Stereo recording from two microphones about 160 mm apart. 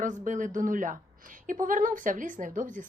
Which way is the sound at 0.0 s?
55° right (ahead or behind).